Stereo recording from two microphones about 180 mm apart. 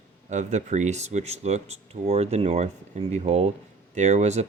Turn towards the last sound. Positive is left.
turn(degrees=-40)  # may be behind; listen again after turning